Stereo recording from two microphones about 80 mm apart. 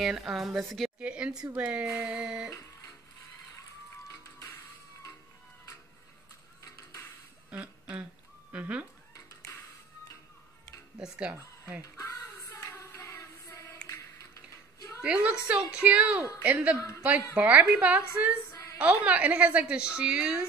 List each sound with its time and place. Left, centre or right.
0.0 s a woman's voice: centre
0.9 s a woman's voice: centre
7.5 s a sound: centre
8.5 s speech: centre
11.0 s a woman's voice: centre
11.8 s hands: left
13.8 s a sound: left
15.0 s a woman's voice: centre
16.7 s a woman's voice: left
17.4 s a woman's voice: centre
18.5 s a sound: left
18.8 s a woman's voice: centre